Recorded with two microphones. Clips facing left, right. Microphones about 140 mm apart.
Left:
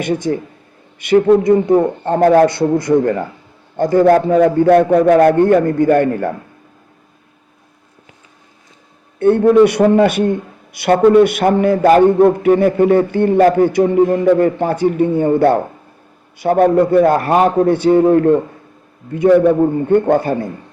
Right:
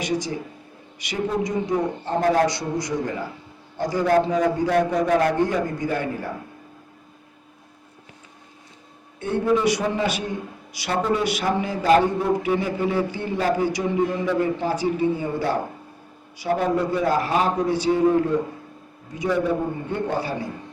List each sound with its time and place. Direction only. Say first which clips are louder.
0.0 s a man's voice: left 8 dB; 55° left (ahead or behind)
9.1 s a man's voice: left 12 dB; 60° left (ahead or behind)